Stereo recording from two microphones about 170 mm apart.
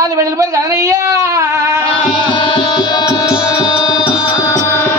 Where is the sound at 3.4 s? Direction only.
25° left (ahead or behind).